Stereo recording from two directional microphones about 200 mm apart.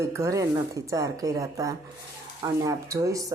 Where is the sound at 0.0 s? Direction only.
15° right (ahead or behind).